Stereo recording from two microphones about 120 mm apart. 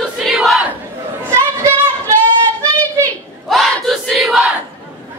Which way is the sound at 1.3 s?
25° right (ahead or behind).